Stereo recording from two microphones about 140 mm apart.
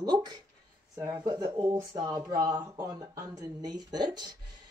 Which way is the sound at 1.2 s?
30° right (ahead or behind).